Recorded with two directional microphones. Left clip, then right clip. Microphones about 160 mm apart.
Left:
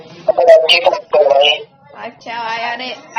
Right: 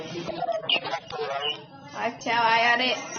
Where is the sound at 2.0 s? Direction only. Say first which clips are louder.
Even; 5° right (ahead or behind).